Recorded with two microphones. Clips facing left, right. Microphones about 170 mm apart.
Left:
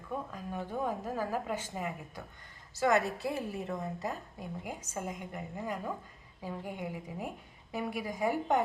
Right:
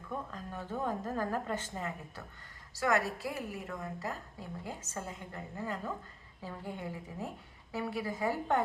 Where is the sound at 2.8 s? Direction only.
20° left (ahead or behind).